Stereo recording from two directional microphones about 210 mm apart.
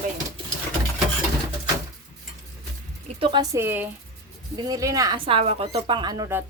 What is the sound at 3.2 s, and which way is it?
A woman's voice, 20° right (ahead or behind).